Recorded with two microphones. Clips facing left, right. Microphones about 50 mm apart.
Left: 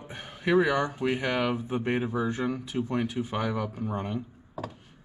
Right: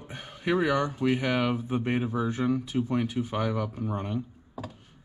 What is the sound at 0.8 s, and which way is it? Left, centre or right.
Speech, centre.